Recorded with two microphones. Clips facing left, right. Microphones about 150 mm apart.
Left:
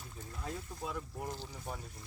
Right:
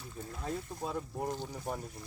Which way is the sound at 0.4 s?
35° right (ahead or behind).